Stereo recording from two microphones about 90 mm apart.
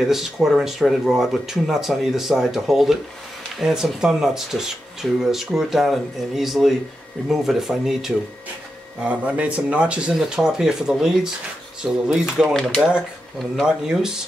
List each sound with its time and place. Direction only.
0.0 s speech: 5° right (ahead or behind)
9.0 s speech: 15° right (ahead or behind)
12.5 s speech: 5° left (ahead or behind)